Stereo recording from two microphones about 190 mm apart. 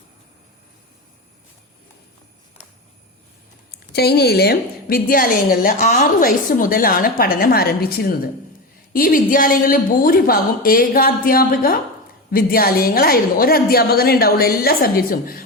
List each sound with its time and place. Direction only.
3.7 s a woman's voice: 55° left (ahead or behind)